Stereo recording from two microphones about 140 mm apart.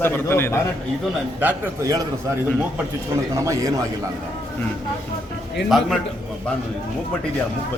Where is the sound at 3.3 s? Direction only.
25° right (ahead or behind).